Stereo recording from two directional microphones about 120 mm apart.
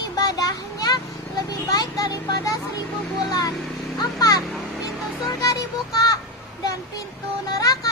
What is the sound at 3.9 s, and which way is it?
Children playing, 30° left (ahead or behind).